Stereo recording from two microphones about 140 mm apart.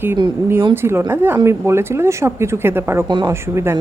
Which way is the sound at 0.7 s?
15° right (ahead or behind).